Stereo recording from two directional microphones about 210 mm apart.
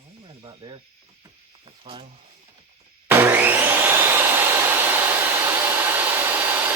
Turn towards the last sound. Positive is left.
turn(degrees=-10)  # may be behind; listen again after turning